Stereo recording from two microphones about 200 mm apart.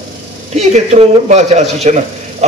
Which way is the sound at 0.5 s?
35° right (ahead or behind).